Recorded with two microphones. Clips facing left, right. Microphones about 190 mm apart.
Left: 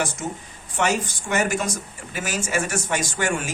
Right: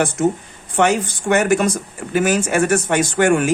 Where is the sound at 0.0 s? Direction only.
55° right (ahead or behind).